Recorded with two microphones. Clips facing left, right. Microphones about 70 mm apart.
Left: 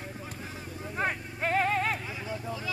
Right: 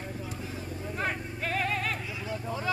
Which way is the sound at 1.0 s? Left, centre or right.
Left.